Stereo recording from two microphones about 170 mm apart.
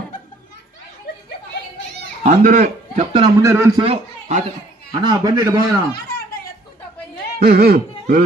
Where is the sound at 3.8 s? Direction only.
35° right (ahead or behind).